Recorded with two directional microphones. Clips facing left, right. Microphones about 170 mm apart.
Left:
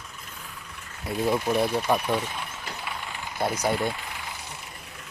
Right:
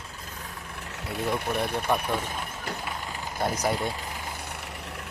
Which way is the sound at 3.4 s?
5° left (ahead or behind).